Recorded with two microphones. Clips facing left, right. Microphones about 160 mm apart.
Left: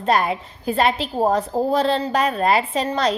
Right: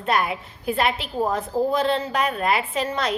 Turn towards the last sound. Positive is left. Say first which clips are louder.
# left 4 dB
turn(degrees=35)  # may be behind; listen again after turning